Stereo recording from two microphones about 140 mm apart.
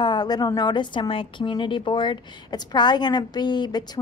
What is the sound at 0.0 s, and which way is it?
A woman's voice, 30° left (ahead or behind).